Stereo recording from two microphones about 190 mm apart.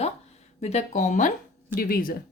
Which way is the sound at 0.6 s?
35° left (ahead or behind).